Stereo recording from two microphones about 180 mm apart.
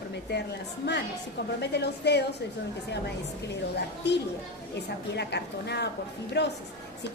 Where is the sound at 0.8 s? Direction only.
65° left (ahead or behind).